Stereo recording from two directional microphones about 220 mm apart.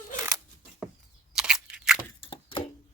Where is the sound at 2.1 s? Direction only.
25° left (ahead or behind).